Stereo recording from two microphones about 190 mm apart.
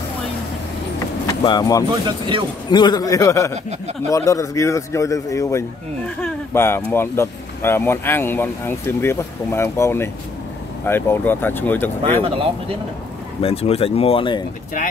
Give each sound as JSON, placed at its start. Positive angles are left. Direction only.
{"t": 1.2, "sound": "speech", "side_deg": 20}
{"t": 1.9, "sound": "speech", "side_deg": -25}
{"t": 2.7, "sound": "a man's voice", "side_deg": 20}
{"t": 12.0, "sound": "speech", "side_deg": -30}
{"t": 13.4, "sound": "speech", "side_deg": 30}